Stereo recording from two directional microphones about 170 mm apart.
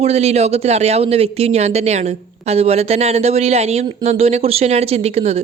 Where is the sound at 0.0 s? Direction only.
40° right (ahead or behind).